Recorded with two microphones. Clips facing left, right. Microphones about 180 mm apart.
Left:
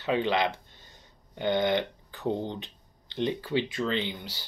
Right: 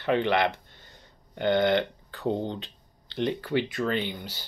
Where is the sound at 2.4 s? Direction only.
15° left (ahead or behind).